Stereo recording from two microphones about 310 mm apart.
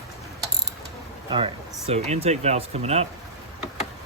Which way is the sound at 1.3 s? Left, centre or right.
Centre.